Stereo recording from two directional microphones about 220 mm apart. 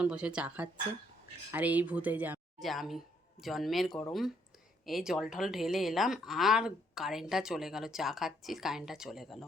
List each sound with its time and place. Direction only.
0.0 s a woman's voice: 5° right (ahead or behind)